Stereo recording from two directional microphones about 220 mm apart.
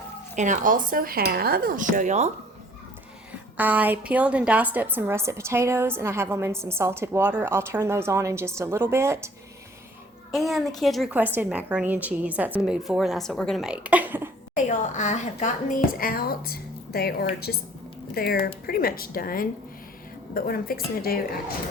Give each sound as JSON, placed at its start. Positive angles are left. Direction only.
{"t": 0.3, "sound": "speech", "side_deg": -35}
{"t": 3.6, "sound": "a woman's voice", "side_deg": -5}
{"t": 10.3, "sound": "a woman's voice", "side_deg": 0}
{"t": 14.5, "sound": "a woman's voice", "side_deg": 35}